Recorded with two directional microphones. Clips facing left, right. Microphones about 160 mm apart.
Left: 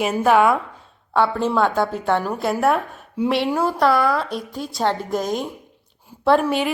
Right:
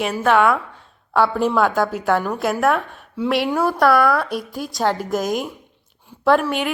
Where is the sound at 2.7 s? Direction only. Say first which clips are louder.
Even; 35° left (ahead or behind).